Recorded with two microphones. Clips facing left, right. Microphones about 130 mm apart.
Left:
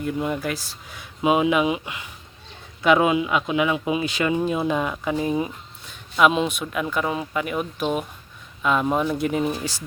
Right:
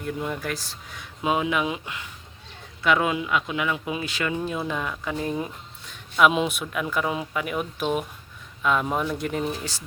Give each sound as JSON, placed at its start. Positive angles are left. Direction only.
{"t": 0.2, "sound": "speech", "side_deg": 5}